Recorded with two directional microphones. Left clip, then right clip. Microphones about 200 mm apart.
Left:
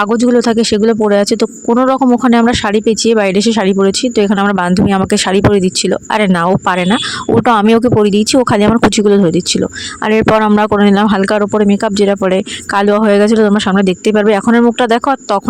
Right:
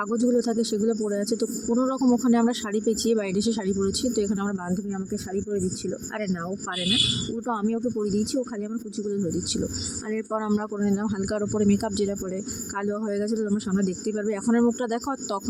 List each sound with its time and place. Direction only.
0.1 s speech: 50° left (ahead or behind)